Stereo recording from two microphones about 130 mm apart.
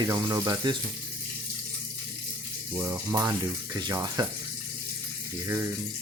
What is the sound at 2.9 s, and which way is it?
Speech, 30° right (ahead or behind).